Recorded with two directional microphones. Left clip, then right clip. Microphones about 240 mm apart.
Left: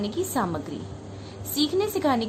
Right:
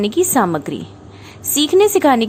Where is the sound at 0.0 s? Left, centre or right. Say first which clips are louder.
Right 12 dB; right.